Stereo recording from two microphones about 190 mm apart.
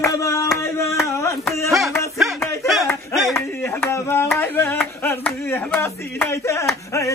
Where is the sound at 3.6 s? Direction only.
10° left (ahead or behind).